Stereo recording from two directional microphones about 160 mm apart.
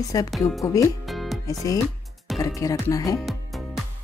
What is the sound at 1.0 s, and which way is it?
Music, centre (ahead or behind).